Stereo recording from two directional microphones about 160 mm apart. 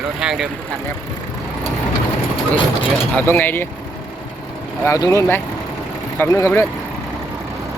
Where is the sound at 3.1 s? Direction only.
10° left (ahead or behind).